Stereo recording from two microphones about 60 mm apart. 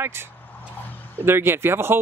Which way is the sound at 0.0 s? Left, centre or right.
Right.